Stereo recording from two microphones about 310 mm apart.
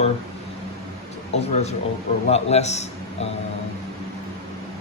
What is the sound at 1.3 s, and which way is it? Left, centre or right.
A man's voice, left.